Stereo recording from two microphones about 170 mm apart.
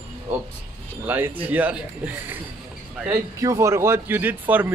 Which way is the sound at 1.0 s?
10° right (ahead or behind).